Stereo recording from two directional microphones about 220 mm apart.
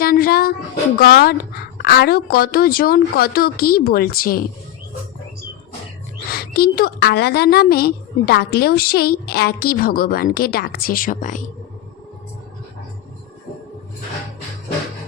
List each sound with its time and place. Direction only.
0.0 s a sound: 40° left (ahead or behind)
0.9 s a woman's voice: 45° left (ahead or behind)
6.2 s a woman's voice: 45° left (ahead or behind)